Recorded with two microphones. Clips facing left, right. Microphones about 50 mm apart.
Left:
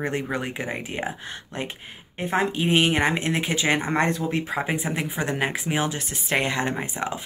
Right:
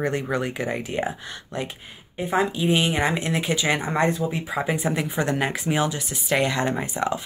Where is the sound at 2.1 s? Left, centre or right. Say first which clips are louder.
Right 1 dB; left.